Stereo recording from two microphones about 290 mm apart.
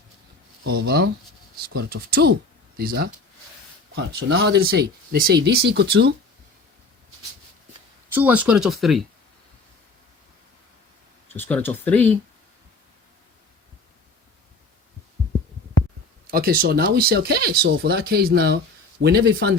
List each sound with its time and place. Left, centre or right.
0.7 s speech: right
8.1 s speech: centre
11.3 s speech: centre
16.2 s speech: right